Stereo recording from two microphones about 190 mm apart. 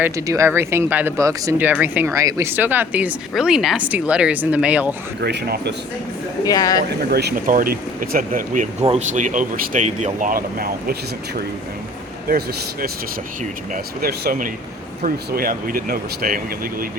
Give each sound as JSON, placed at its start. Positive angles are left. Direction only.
{"t": 0.0, "sound": "speech", "side_deg": -15}
{"t": 5.2, "sound": "speech", "side_deg": -60}
{"t": 6.4, "sound": "speech", "side_deg": 20}
{"t": 7.1, "sound": "speech", "side_deg": -55}
{"t": 8.8, "sound": "speech", "side_deg": -35}
{"t": 14.0, "sound": "speech", "side_deg": -55}